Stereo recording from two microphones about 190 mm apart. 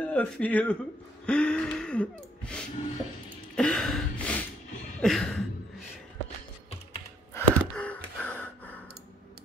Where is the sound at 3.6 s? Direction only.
5° left (ahead or behind).